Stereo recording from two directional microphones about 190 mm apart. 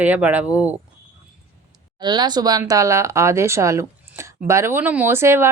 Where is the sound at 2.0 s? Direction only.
25° right (ahead or behind).